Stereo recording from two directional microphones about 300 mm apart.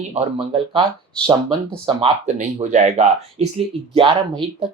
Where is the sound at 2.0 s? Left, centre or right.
Right.